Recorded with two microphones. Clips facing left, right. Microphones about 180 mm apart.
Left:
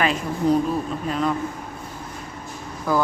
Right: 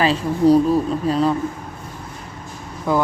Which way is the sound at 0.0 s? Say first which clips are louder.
Right 6 dB; 30° right (ahead or behind).